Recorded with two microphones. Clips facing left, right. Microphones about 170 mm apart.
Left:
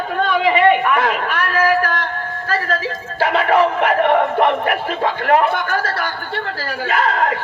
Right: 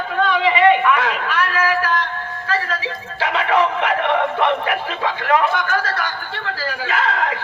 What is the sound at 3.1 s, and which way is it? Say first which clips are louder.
Speech: left 3 dB; 50° left (ahead or behind).